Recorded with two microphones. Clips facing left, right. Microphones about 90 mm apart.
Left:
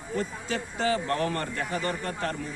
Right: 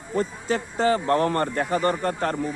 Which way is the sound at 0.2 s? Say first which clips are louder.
Right 7 dB; 40° right (ahead or behind).